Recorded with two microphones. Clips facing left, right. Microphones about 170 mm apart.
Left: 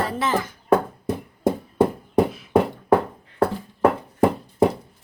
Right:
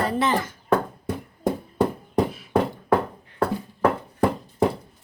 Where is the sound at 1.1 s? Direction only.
20° left (ahead or behind).